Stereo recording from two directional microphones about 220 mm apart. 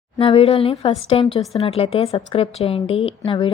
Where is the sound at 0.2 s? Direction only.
25° left (ahead or behind).